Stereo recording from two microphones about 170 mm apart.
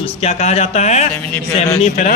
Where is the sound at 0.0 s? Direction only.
40° left (ahead or behind).